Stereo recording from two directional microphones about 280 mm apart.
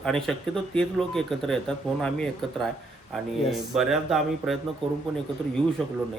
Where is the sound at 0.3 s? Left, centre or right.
Centre.